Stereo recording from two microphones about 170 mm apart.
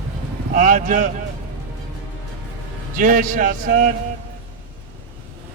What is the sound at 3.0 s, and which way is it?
Speech, 50° right (ahead or behind).